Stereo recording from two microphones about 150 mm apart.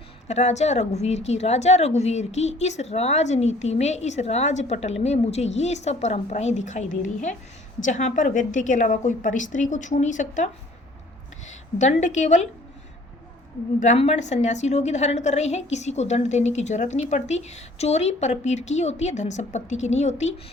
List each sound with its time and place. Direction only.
0.3 s a woman's voice: 50° left (ahead or behind)
13.7 s a woman's voice: 50° left (ahead or behind)